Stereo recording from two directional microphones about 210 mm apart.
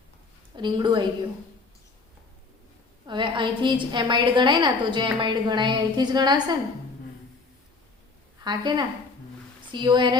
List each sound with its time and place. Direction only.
0.5 s a woman's voice: 20° right (ahead or behind)
3.1 s a woman's voice: 20° right (ahead or behind)
8.4 s a woman's voice: 20° right (ahead or behind)